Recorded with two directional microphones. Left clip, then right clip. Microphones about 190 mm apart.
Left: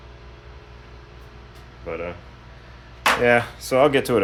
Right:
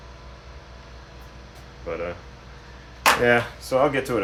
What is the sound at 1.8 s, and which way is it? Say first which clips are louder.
Speech: even; 15° left (ahead or behind).